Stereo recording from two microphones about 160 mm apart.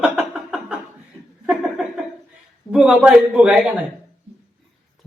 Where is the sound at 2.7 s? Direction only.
5° right (ahead or behind).